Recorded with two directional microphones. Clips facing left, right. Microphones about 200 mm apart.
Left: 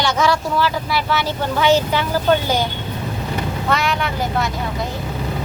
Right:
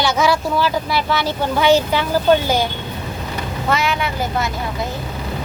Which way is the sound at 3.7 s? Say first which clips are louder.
Right 1 dB; centre (ahead or behind).